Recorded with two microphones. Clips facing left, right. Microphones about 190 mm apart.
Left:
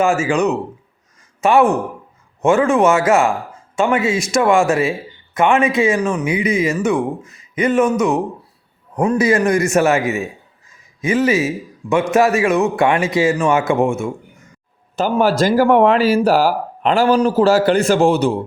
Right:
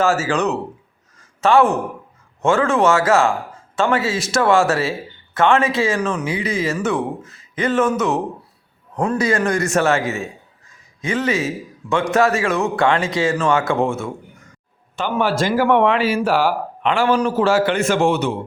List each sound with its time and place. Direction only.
0.0 s a man's voice: 15° left (ahead or behind)
14.9 s speech: 40° left (ahead or behind)